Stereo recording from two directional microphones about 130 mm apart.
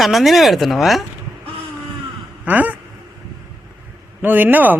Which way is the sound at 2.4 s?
10° right (ahead or behind).